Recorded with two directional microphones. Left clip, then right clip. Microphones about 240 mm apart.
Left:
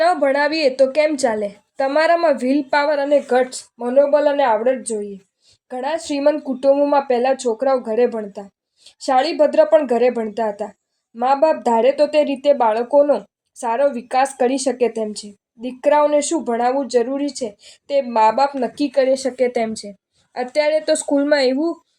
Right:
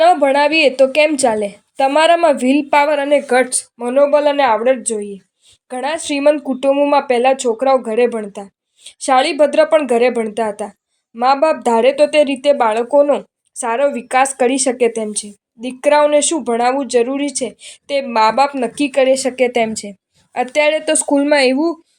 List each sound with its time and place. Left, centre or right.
0.0 s a woman's voice: centre